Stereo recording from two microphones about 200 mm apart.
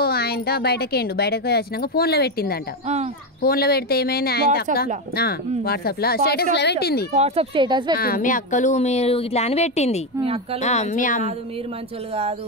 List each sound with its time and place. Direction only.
0.0 s a woman's voice: 50° left (ahead or behind)
7.2 s speech: 30° right (ahead or behind)
8.0 s speech: 45° left (ahead or behind)
10.2 s speech: 30° right (ahead or behind)
10.6 s speech: 35° left (ahead or behind)